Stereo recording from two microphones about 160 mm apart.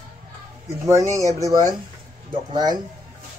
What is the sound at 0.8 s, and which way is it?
A man's voice, 20° right (ahead or behind).